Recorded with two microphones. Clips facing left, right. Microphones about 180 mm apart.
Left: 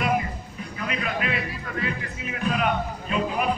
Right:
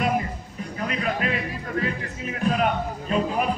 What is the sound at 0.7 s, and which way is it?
Speech, 40° right (ahead or behind).